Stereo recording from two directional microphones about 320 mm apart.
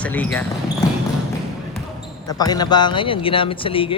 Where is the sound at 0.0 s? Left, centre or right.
Centre.